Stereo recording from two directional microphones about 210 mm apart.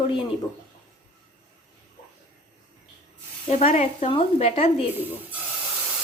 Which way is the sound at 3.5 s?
35° left (ahead or behind).